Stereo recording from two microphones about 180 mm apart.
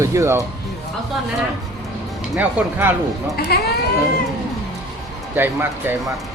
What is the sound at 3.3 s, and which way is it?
Speech, 60° left (ahead or behind).